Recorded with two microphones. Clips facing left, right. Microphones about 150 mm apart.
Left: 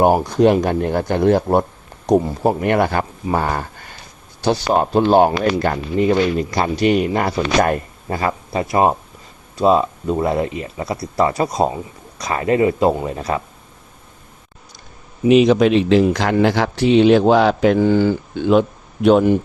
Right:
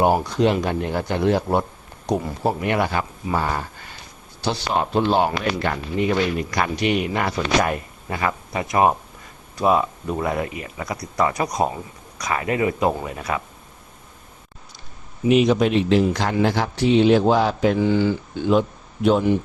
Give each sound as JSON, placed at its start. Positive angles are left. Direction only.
{"t": 0.0, "sound": "speech", "side_deg": 45}
{"t": 15.3, "sound": "speech", "side_deg": 90}
{"t": 17.7, "sound": "speech", "side_deg": 50}
{"t": 18.3, "sound": "speech", "side_deg": 65}